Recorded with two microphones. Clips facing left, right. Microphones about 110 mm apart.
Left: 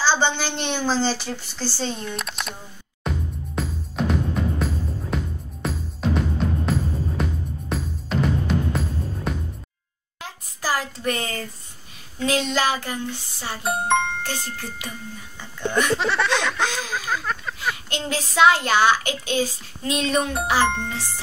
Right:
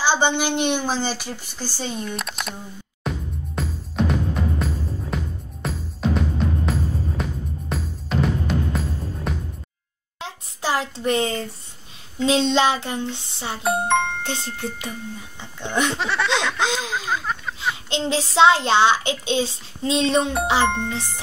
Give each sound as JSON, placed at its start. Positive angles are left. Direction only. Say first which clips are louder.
{"t": 0.0, "sound": "a woman's voice", "louder": "right 1 dB", "side_deg": -15}
{"t": 2.1, "sound": "speech", "louder": "right 1 dB", "side_deg": 0}
{"t": 3.0, "sound": "music", "louder": "even", "side_deg": 0}
{"t": 10.2, "sound": "a sound", "louder": "right 1 dB", "side_deg": -25}
{"t": 12.2, "sound": "a child's voice", "louder": "right 4 dB", "side_deg": -25}
{"t": 13.8, "sound": "music", "louder": "right 1 dB", "side_deg": 0}
{"t": 14.2, "sound": "a child's voice", "louder": "right 2 dB", "side_deg": -20}
{"t": 16.0, "sound": "speech", "louder": "left 1 dB", "side_deg": 0}
{"t": 16.6, "sound": "a child's voice", "louder": "right 2 dB", "side_deg": -20}
{"t": 20.6, "sound": "speech", "louder": "right 1 dB", "side_deg": 0}